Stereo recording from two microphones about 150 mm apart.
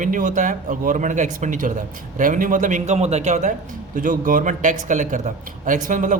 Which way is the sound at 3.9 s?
60° right (ahead or behind).